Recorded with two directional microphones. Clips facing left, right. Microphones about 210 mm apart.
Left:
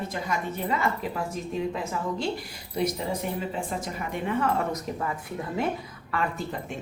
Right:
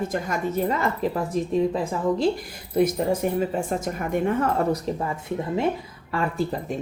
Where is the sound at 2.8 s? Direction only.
50° right (ahead or behind).